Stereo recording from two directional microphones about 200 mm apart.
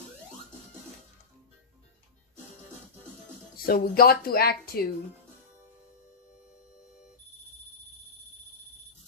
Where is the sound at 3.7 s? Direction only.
45° left (ahead or behind).